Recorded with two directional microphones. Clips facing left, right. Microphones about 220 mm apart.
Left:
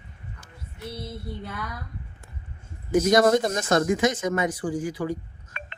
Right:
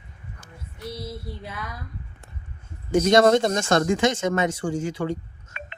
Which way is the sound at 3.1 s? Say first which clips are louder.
Right 3 dB; 25° right (ahead or behind).